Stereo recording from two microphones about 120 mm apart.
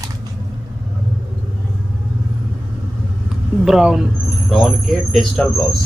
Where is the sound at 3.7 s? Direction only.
5° right (ahead or behind).